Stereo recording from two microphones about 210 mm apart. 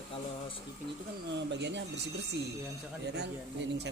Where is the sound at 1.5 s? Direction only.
55° right (ahead or behind).